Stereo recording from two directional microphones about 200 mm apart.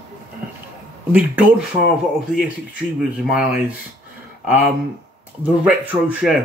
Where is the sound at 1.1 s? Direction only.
5° right (ahead or behind).